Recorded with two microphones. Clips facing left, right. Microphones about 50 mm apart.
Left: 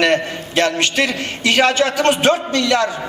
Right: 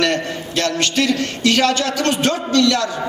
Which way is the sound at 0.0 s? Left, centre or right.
Left.